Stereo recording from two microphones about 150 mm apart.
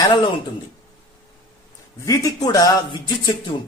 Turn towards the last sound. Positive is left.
turn(degrees=35)  # may be behind; listen again after turning